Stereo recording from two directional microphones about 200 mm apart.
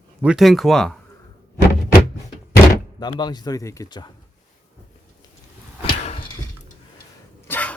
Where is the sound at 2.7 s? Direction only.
20° left (ahead or behind).